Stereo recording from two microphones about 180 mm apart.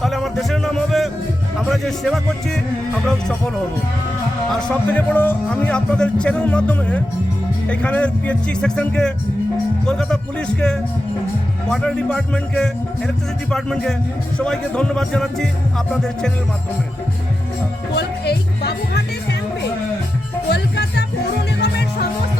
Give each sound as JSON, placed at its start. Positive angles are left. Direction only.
{"t": 0.0, "sound": "music", "side_deg": 0}
{"t": 1.6, "sound": "speech", "side_deg": 0}
{"t": 11.7, "sound": "speech", "side_deg": 5}
{"t": 17.9, "sound": "music", "side_deg": 65}
{"t": 20.5, "sound": "music", "side_deg": 70}